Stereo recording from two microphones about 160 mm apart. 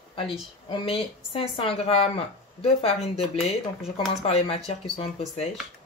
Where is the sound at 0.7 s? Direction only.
35° left (ahead or behind).